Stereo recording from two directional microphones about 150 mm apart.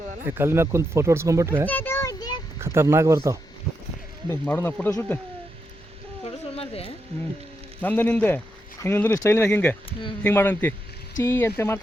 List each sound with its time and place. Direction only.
0.3 s speech: 15° right (ahead or behind)
1.6 s a child's voice: 15° left (ahead or behind)
2.1 s a sound: 30° left (ahead or behind)
2.6 s speech: 15° right (ahead or behind)
4.3 s speech: 15° left (ahead or behind)
6.2 s a sound: 40° left (ahead or behind)
7.8 s speech: 10° left (ahead or behind)